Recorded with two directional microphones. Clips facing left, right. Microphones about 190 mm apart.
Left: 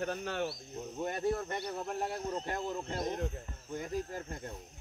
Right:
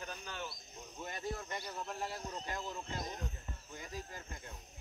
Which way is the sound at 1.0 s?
55° left (ahead or behind).